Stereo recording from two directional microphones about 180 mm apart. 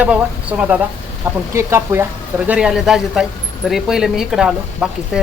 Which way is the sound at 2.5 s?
5° right (ahead or behind).